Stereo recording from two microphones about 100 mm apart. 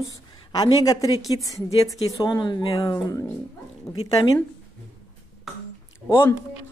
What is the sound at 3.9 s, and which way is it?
Speech, 5° left (ahead or behind).